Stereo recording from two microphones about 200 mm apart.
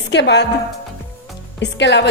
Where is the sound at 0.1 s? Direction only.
60° left (ahead or behind).